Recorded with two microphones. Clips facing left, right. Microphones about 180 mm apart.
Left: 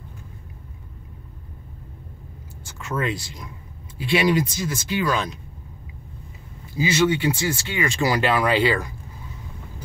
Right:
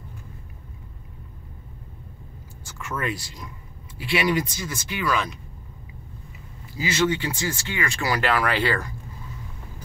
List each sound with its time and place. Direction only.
2.9 s speech: 25° left (ahead or behind)
6.8 s speech: 20° left (ahead or behind)